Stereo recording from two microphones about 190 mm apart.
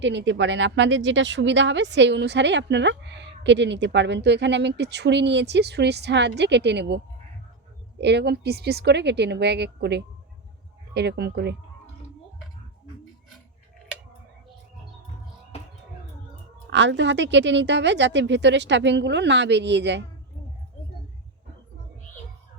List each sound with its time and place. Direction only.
0.0 s speech: 70° right (ahead or behind)
8.0 s a woman's voice: 65° right (ahead or behind)
16.6 s speech: 70° right (ahead or behind)